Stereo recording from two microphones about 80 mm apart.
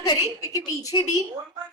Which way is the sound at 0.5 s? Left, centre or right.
Left.